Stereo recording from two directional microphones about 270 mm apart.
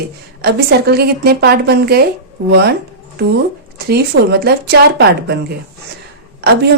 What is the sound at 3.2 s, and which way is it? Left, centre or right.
A woman's voice, right.